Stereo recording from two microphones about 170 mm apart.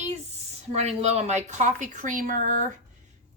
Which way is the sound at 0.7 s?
40° right (ahead or behind).